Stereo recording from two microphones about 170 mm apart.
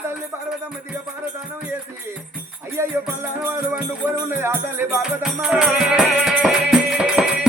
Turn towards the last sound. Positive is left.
turn(degrees=-5)  # may be behind; listen again after turning